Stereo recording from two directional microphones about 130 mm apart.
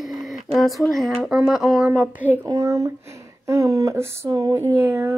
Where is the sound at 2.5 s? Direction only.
25° right (ahead or behind).